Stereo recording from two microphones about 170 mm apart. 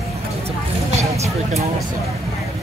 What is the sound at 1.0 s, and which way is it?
Vehicle, 15° right (ahead or behind).